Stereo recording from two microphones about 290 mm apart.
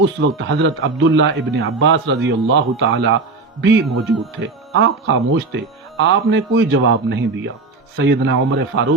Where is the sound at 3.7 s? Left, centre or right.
Centre.